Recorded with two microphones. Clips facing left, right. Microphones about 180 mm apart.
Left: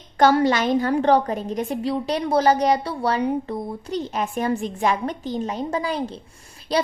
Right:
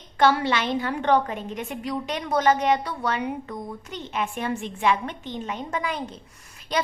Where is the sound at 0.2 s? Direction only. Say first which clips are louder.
Left 4 dB; 40° left (ahead or behind).